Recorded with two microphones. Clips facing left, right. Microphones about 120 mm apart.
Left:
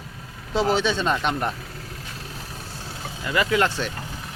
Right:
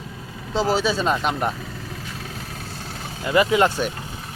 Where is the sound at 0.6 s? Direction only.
5° right (ahead or behind).